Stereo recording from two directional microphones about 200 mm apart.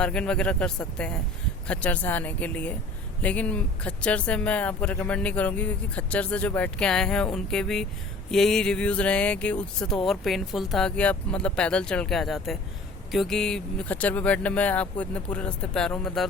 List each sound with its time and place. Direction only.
0.0 s speech: 5° left (ahead or behind)